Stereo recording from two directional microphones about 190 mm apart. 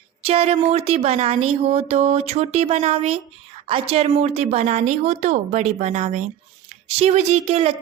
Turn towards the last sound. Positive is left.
turn(degrees=-30)  # may be behind; listen again after turning